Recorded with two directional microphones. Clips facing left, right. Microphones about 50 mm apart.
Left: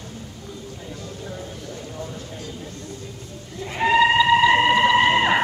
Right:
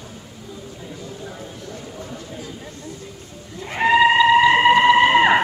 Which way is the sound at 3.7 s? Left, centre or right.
Centre.